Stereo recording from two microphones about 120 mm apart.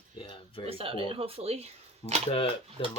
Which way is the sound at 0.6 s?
50° right (ahead or behind).